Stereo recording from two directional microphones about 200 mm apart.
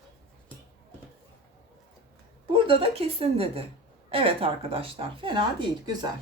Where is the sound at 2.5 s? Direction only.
25° right (ahead or behind).